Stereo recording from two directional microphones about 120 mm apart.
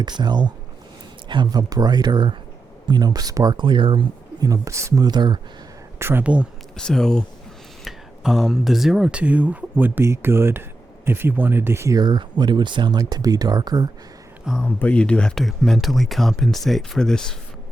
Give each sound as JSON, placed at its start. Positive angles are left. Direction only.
{"t": 0.0, "sound": "speech", "side_deg": -35}
{"t": 4.4, "sound": "speech", "side_deg": -25}
{"t": 6.0, "sound": "speech", "side_deg": -20}
{"t": 6.7, "sound": "speech", "side_deg": 5}
{"t": 14.6, "sound": "speech", "side_deg": 10}